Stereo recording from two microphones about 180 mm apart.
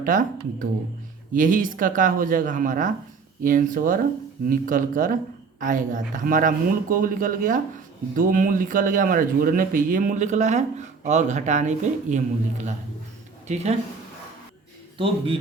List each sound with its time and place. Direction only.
0.0 s speech: 50° right (ahead or behind)
14.9 s a man's voice: 30° right (ahead or behind)